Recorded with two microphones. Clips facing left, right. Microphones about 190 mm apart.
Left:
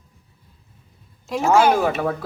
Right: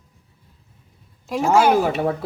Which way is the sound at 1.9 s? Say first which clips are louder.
Right 1 dB; 35° right (ahead or behind).